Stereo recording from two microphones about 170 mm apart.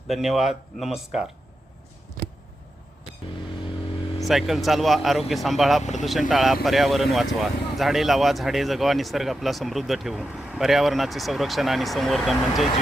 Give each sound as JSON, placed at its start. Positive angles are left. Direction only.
{"t": 0.1, "sound": "speech", "side_deg": 0}
{"t": 2.2, "sound": "a sound", "side_deg": -55}
{"t": 4.2, "sound": "speech", "side_deg": 0}
{"t": 5.8, "sound": "speech", "side_deg": 45}
{"t": 6.1, "sound": "speech", "side_deg": 0}